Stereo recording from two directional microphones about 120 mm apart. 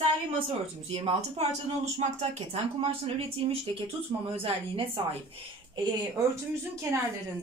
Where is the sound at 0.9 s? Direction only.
50° right (ahead or behind).